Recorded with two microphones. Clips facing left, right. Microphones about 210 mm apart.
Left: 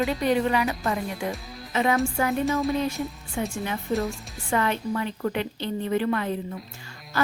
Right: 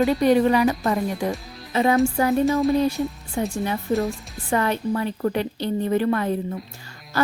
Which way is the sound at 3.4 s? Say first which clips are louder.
Right 4 dB; 35° right (ahead or behind).